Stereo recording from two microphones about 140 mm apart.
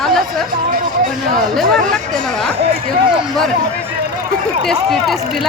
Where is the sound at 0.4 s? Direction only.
85° right.